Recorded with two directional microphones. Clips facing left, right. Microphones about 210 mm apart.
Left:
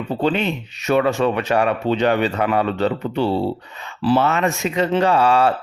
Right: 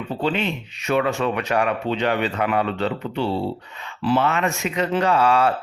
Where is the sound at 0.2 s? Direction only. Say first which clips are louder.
Left 3 dB; 40° left (ahead or behind).